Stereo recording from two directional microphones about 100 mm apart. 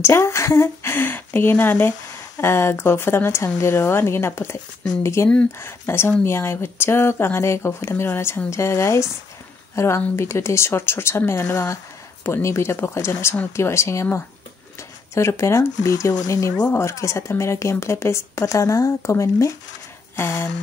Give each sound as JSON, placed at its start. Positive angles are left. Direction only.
{"t": 0.0, "sound": "speech", "side_deg": 25}